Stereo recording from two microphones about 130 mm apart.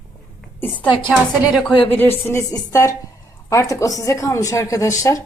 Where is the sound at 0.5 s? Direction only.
15° left (ahead or behind).